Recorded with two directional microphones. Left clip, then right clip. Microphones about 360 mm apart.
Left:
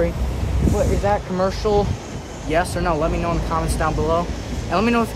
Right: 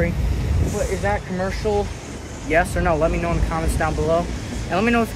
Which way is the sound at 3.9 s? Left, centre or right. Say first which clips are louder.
Even; left.